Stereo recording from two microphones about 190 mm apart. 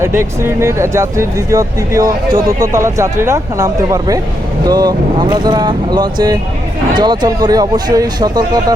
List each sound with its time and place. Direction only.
0.0 s speech: 15° right (ahead or behind)